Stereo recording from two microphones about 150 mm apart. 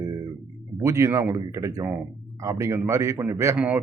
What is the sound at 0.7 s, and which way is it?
A man's voice, 20° right (ahead or behind).